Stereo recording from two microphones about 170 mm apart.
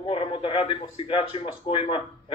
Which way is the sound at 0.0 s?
30° left (ahead or behind).